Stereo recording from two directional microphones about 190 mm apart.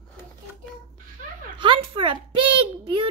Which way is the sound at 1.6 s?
25° right (ahead or behind).